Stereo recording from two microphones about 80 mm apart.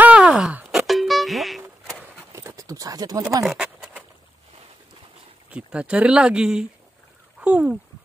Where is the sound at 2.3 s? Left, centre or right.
Right.